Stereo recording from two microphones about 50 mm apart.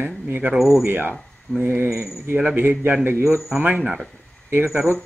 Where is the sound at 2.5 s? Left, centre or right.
Right.